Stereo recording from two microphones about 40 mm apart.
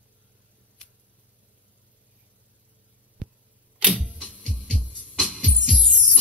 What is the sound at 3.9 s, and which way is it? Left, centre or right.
Music, right.